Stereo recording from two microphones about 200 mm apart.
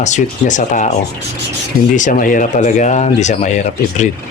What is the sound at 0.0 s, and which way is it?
Speech, 35° left (ahead or behind).